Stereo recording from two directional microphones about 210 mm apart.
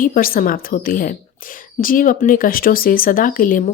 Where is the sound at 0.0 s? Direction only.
40° left (ahead or behind).